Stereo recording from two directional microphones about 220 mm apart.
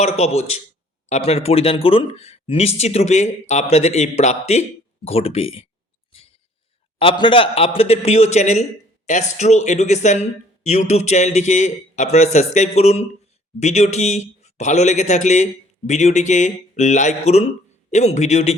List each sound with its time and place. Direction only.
0.0 s speech: 30° left (ahead or behind)
7.0 s speech: 25° left (ahead or behind)